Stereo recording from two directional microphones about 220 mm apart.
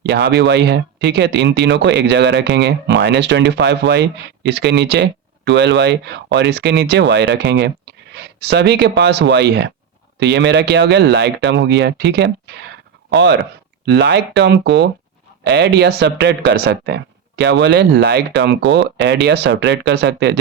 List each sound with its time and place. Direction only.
0.0 s speech: 50° right (ahead or behind)